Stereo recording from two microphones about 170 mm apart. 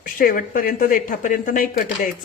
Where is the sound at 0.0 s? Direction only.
55° left (ahead or behind).